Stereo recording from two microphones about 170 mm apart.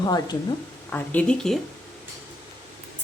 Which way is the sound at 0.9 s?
10° left (ahead or behind).